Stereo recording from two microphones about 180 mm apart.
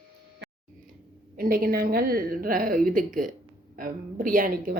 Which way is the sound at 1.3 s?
55° right (ahead or behind).